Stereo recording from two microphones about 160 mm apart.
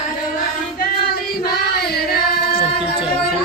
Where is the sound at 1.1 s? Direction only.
75° left (ahead or behind).